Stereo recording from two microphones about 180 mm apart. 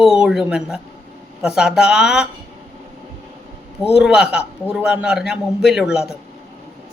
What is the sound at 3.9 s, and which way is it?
Speech, 5° right (ahead or behind).